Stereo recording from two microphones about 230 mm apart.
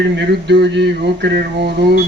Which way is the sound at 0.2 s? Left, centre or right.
Right.